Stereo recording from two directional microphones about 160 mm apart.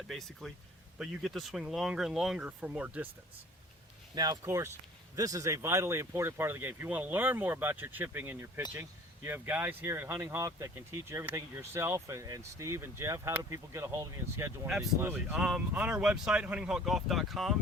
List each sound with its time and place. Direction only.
0.1 s speech: centre (ahead or behind)
4.1 s speech: 25° right (ahead or behind)
15.0 s speech: 5° right (ahead or behind)